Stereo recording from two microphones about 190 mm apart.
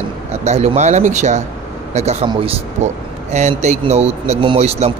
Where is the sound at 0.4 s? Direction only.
35° right (ahead or behind).